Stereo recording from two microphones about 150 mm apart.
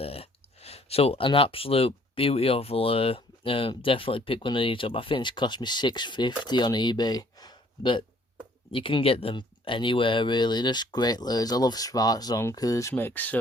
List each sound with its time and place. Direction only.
0.0 s speech: 40° left (ahead or behind); by 12.9 s 25° left (ahead or behind)
12.9 s speech: 15° left (ahead or behind)